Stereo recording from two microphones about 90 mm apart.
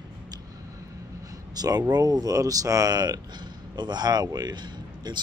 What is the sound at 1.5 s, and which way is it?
A man's voice, 45° right (ahead or behind).